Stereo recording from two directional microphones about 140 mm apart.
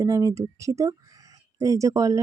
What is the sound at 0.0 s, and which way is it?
Speech, 25° right (ahead or behind).